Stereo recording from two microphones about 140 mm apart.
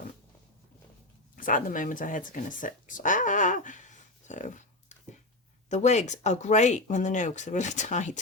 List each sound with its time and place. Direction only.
1.4 s speech: 75° left (ahead or behind); by 8.2 s 60° left (ahead or behind)